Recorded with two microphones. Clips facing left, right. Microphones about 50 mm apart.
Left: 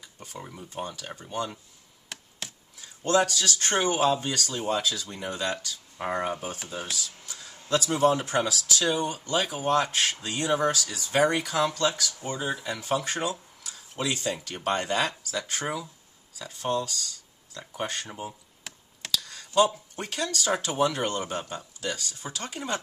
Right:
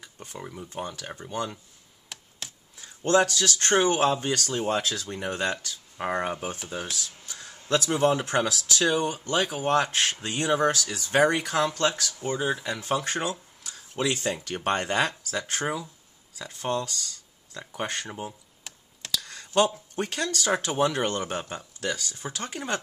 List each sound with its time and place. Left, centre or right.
0.0 s a sound: right
0.4 s speech: centre
0.8 s speech: right
3.0 s speech: right
19.3 s a sound: right
20.0 s speech: right